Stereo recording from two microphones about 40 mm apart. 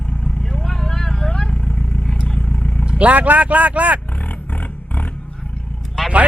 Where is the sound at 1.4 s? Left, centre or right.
Left.